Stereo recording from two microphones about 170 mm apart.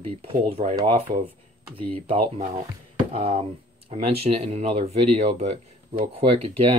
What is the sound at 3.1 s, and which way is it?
Speech, 35° right (ahead or behind).